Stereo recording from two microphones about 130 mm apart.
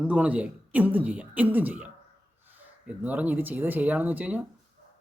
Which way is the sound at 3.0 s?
10° right (ahead or behind).